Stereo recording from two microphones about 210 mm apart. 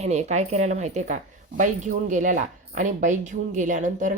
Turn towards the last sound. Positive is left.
turn(degrees=-35)  # may be behind; listen again after turning